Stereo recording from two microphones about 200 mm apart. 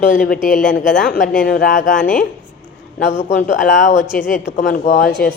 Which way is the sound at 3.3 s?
40° left (ahead or behind).